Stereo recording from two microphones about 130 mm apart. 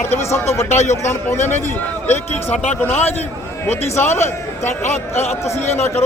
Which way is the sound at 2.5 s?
60° left (ahead or behind).